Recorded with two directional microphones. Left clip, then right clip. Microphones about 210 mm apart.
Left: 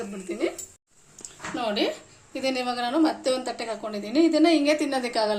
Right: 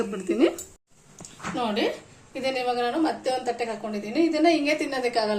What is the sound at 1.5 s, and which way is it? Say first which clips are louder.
A woman's voice: even; 45° left (ahead or behind).